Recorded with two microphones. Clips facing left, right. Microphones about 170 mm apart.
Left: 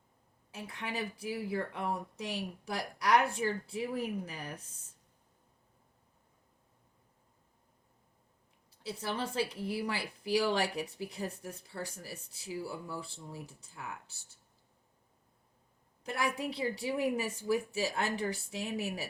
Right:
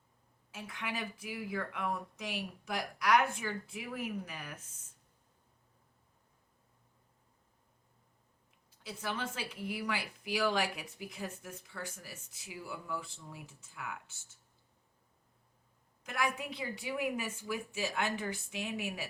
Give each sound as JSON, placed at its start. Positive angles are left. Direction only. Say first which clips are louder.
{"t": 0.5, "sound": "speech", "louder": "left 2 dB", "side_deg": 35}
{"t": 8.8, "sound": "speech", "louder": "left 3 dB", "side_deg": 35}
{"t": 16.0, "sound": "speech", "louder": "left 2 dB", "side_deg": 35}